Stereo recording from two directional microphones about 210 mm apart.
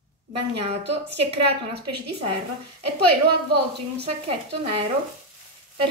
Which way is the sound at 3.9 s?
25° right (ahead or behind).